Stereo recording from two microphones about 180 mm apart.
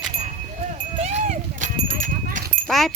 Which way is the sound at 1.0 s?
40° right (ahead or behind).